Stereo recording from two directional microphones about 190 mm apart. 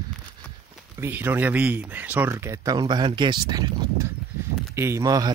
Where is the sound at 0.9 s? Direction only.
10° right (ahead or behind).